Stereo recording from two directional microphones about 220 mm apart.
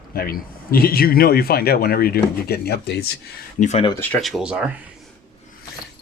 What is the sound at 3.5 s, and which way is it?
Speech, 30° left (ahead or behind).